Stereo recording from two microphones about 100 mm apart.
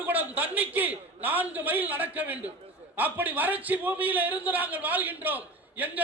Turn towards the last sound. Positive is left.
turn(degrees=-15)  # may be behind; listen again after turning